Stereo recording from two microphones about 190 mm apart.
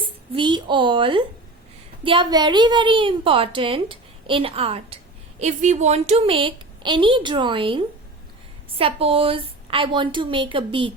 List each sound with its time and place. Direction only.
0.3 s a woman's voice: 25° right (ahead or behind)